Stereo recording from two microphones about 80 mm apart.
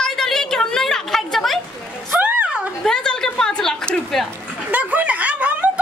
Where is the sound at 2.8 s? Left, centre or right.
Centre.